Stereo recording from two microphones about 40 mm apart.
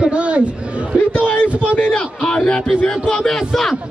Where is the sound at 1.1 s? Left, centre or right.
Left.